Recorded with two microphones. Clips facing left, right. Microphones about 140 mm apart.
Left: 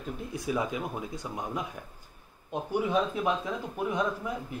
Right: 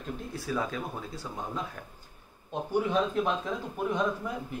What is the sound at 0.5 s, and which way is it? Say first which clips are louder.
Speech: left 2 dB; 15° left (ahead or behind).